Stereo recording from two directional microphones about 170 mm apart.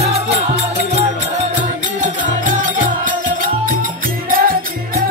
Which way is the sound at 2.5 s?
50° right (ahead or behind).